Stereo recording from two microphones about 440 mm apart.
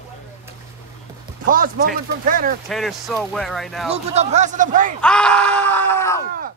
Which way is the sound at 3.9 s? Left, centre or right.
Centre.